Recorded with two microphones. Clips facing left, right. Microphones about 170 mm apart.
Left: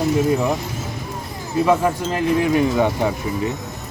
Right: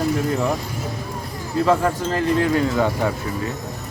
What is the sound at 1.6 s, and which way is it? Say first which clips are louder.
Speech: left 1 dB; 15° left (ahead or behind).